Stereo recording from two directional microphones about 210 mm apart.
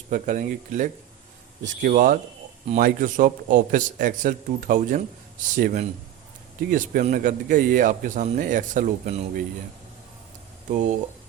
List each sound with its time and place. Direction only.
0.1 s speech: 40° right (ahead or behind)